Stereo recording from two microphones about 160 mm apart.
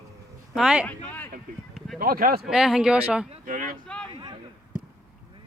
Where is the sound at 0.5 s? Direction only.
5° right (ahead or behind).